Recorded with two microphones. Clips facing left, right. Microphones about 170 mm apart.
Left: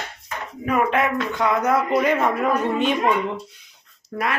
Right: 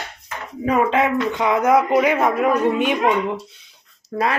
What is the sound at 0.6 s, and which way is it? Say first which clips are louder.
Speech: right 3 dB; 25° right (ahead or behind).